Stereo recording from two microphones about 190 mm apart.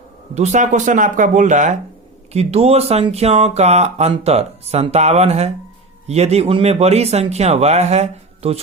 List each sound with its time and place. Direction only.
0.3 s speech: 40° right (ahead or behind)